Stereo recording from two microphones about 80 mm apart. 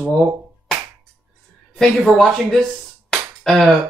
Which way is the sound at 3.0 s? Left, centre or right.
Centre.